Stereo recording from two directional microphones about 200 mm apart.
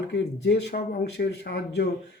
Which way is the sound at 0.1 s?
55° left (ahead or behind).